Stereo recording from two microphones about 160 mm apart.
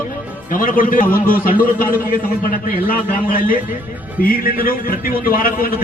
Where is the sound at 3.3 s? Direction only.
65° left (ahead or behind).